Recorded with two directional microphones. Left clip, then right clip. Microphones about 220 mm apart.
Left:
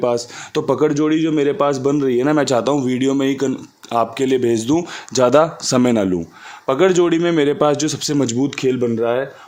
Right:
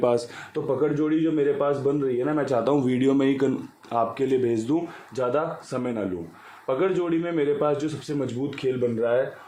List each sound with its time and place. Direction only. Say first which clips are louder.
0.0 s speech: left 4 dB; 20° left (ahead or behind)
0.5 s speech: left 8 dB; 50° left (ahead or behind)
2.7 s speech: left 4 dB; 20° left (ahead or behind)
3.9 s speech: left 6 dB; 30° left (ahead or behind)
5.1 s speech: left 12 dB; 55° left (ahead or behind)